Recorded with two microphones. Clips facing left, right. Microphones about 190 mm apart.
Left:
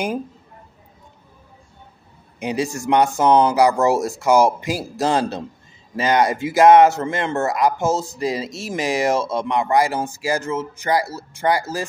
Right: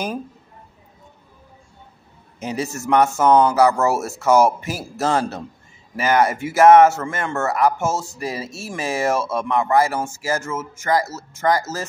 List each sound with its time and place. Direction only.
2.4 s speech: 15° left (ahead or behind)